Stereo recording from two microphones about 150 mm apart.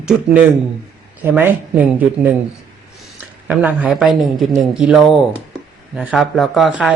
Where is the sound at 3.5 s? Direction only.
10° right (ahead or behind).